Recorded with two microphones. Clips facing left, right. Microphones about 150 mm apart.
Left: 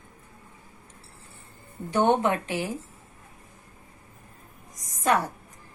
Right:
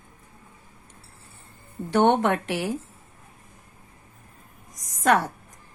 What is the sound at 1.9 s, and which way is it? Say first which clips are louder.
Speech: right 2 dB; 70° right (ahead or behind).